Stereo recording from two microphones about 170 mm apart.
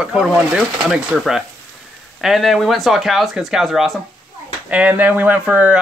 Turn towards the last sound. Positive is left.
turn(degrees=-10)  # may be behind; listen again after turning